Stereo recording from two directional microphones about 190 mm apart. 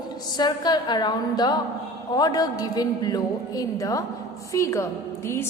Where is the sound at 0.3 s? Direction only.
20° left (ahead or behind).